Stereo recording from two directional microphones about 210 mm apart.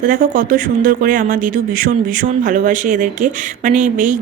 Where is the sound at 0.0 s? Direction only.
40° right (ahead or behind).